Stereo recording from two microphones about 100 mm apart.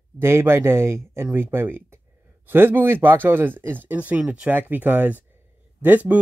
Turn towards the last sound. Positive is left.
turn(degrees=-15)  # may be behind; listen again after turning